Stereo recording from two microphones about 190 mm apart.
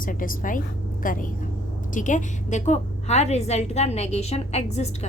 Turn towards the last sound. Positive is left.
turn(degrees=35)  # may be behind; listen again after turning